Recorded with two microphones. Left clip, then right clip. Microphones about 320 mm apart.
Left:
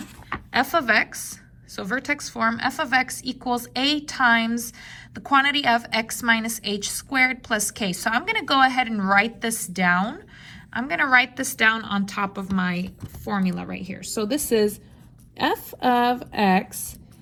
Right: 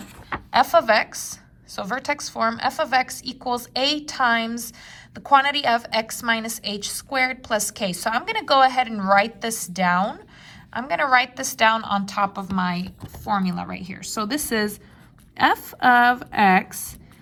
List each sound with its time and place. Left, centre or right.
0.5 s a woman's voice: centre; by 15.9 s right